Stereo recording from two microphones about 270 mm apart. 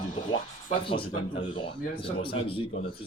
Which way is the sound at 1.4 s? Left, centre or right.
Centre.